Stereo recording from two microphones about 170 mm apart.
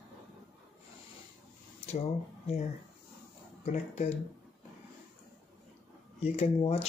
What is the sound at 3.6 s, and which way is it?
Speech, 40° left (ahead or behind).